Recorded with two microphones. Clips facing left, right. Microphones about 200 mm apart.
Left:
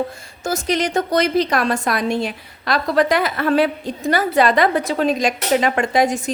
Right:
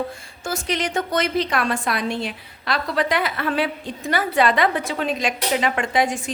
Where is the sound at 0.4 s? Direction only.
40° left (ahead or behind).